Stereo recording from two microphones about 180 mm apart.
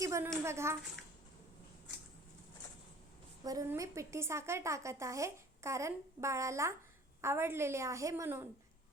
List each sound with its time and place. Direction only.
0.0 s a sound: 15° right (ahead or behind)
0.4 s speech: 15° right (ahead or behind)
3.4 s speech: 20° right (ahead or behind)